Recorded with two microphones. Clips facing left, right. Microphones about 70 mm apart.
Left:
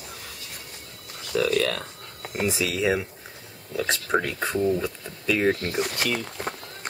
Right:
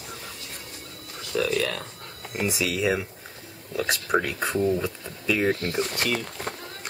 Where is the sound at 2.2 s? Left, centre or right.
Centre.